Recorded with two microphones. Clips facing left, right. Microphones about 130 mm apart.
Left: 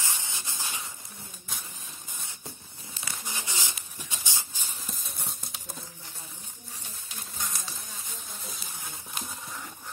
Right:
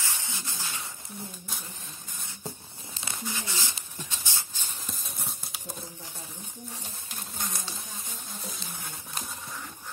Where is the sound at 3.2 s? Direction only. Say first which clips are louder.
Right 2 dB; 15° left (ahead or behind).